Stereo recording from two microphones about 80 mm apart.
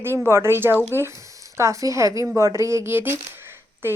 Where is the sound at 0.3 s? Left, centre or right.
Right.